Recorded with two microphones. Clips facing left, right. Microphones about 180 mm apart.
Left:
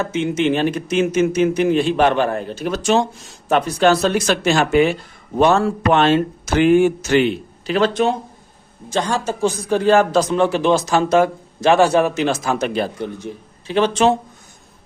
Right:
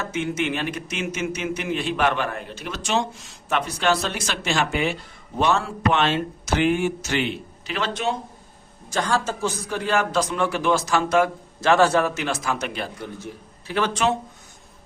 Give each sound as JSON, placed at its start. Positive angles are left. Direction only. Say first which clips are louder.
{"t": 0.1, "sound": "a man's voice", "louder": "left 7 dB", "side_deg": 20}
{"t": 8.9, "sound": "a man's voice", "louder": "left 3 dB", "side_deg": 20}
{"t": 11.6, "sound": "a man's voice", "louder": "left 4 dB", "side_deg": 15}
{"t": 13.0, "sound": "a man's voice", "louder": "left 7 dB", "side_deg": 20}